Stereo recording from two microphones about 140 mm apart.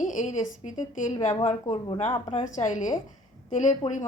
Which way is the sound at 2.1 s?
40° left (ahead or behind).